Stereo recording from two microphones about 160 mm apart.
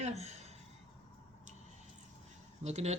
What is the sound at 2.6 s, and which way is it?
Speech, 45° right (ahead or behind).